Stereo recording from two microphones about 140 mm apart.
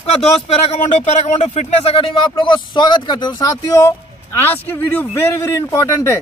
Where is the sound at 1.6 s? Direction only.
45° left (ahead or behind).